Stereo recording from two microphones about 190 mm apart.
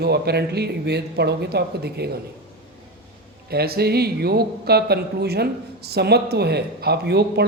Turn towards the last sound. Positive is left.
turn(degrees=-60)  # may be behind; listen again after turning